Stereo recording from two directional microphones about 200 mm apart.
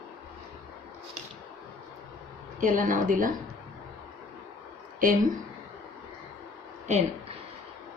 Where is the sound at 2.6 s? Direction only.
40° right (ahead or behind).